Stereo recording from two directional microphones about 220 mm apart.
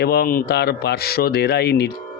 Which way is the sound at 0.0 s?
45° left (ahead or behind).